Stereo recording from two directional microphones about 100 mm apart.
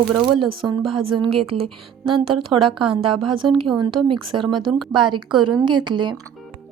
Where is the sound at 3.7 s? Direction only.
45° right (ahead or behind).